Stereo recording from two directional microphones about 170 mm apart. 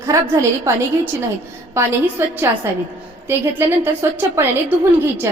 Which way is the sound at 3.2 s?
15° right (ahead or behind).